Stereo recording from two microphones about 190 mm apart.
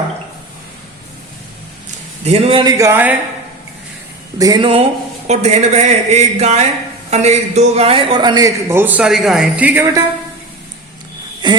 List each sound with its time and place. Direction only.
2.2 s a man's voice: 35° right (ahead or behind)
2.7 s a man's voice: 15° right (ahead or behind)
4.4 s a man's voice: 20° right (ahead or behind)
11.4 s a sound: 25° right (ahead or behind)